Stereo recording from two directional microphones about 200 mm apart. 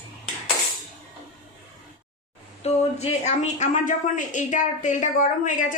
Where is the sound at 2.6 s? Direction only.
35° left (ahead or behind).